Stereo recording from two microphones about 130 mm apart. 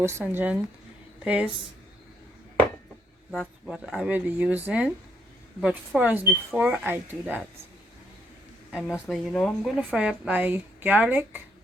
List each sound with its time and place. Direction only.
0.0 s speech: 20° right (ahead or behind)
3.3 s speech: centre (ahead or behind)
8.7 s speech: centre (ahead or behind)
9.6 s speech: 5° right (ahead or behind)